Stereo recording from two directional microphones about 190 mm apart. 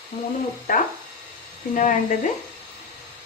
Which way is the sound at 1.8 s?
40° left (ahead or behind).